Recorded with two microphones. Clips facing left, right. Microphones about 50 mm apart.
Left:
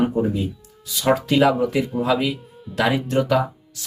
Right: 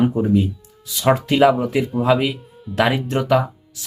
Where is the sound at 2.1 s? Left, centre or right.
Right.